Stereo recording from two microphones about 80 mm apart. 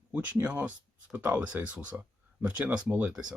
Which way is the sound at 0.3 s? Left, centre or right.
Centre.